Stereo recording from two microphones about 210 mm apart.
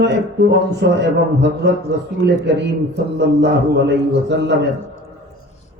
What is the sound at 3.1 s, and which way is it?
Speech, 55° right (ahead or behind).